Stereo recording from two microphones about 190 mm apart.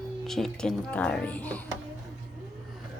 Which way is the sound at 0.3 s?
Centre (ahead or behind).